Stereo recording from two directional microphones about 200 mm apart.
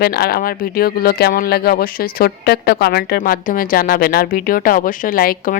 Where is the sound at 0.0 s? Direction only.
50° left (ahead or behind).